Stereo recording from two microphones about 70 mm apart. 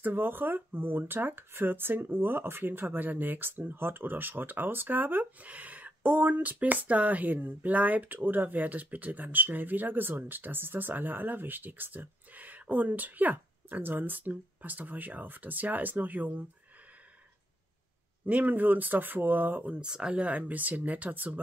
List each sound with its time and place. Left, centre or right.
0.0 s speech: right
18.2 s speech: right